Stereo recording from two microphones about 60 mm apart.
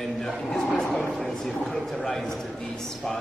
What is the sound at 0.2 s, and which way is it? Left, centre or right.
Speech, centre.